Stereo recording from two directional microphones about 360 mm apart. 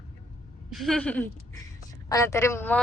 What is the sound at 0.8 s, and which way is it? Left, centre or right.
A woman's voice, centre.